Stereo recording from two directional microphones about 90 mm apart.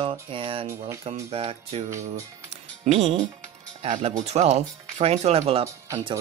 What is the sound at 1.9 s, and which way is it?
Speech, 35° right (ahead or behind).